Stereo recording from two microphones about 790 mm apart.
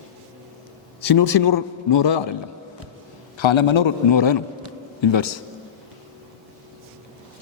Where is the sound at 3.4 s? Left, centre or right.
Left.